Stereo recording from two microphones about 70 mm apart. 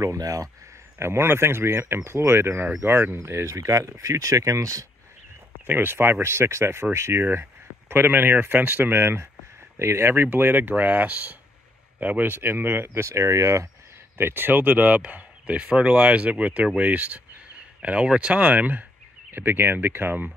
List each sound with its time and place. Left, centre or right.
0.0 s speech: right
0.9 s speech: right
3.2 s speech: right
5.7 s speech: right
14.1 s speech: right